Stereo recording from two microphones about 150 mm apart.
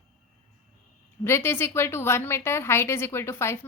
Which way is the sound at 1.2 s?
15° left (ahead or behind).